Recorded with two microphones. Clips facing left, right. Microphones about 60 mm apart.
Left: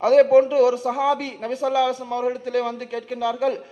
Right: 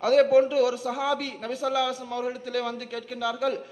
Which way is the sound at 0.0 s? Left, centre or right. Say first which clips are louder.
Left 5 dB; left.